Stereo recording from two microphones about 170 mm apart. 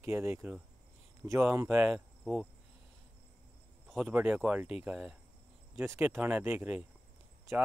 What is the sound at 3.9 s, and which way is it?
Speech, 5° right (ahead or behind).